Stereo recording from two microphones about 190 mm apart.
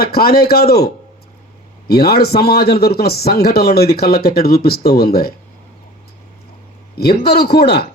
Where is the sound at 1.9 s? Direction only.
55° left (ahead or behind).